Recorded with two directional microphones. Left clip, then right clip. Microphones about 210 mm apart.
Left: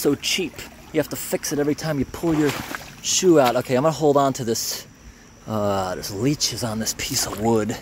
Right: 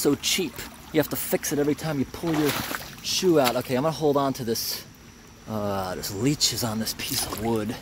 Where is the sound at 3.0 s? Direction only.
25° left (ahead or behind).